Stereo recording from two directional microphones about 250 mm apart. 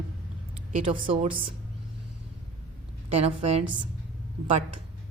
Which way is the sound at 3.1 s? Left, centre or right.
Right.